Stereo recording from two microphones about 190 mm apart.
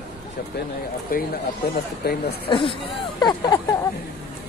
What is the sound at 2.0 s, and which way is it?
Speech, 55° left (ahead or behind).